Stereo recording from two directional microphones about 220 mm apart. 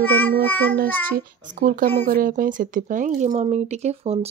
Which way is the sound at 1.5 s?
35° right (ahead or behind).